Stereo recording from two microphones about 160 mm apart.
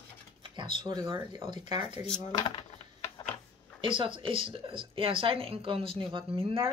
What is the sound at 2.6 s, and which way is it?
Typing, 40° left (ahead or behind).